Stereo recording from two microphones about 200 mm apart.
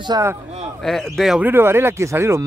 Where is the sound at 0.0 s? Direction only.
15° right (ahead or behind).